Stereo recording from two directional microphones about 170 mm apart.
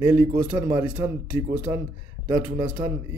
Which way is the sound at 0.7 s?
25° right (ahead or behind).